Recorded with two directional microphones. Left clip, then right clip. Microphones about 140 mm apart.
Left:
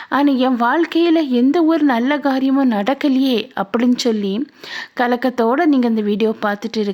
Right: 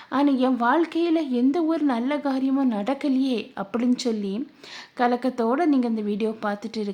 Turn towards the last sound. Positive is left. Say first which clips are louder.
# left 9 dB
turn(degrees=35)  # may be behind; listen again after turning